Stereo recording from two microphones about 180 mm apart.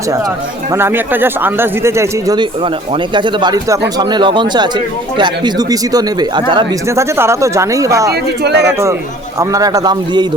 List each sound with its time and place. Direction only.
0.7 s speech: 15° right (ahead or behind)
8.1 s speech: 65° right (ahead or behind)
9.4 s speech: 20° right (ahead or behind)